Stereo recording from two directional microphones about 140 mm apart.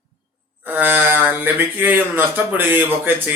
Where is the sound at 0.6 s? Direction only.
15° right (ahead or behind).